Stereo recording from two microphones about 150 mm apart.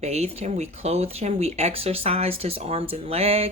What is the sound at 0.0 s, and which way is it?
Speech, 45° right (ahead or behind).